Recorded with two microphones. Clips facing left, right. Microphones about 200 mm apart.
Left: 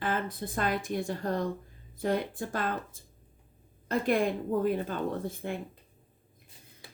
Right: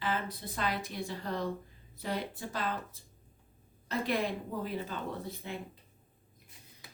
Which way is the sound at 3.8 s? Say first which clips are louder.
Left 5 dB; 50° left (ahead or behind).